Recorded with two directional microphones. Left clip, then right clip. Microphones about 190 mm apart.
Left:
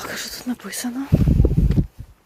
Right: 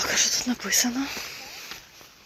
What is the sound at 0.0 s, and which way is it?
Speech, 30° left (ahead or behind).